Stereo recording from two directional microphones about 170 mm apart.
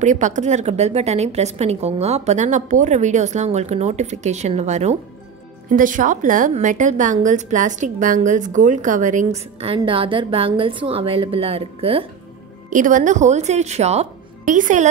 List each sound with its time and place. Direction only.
0.0 s a woman's voice: 45° right (ahead or behind)
12.6 s a woman's voice: 50° right (ahead or behind)